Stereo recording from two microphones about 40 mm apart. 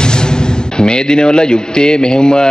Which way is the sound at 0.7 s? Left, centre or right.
Centre.